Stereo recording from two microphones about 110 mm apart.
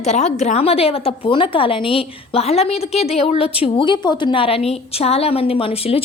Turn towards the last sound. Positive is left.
turn(degrees=60)  # may be behind; listen again after turning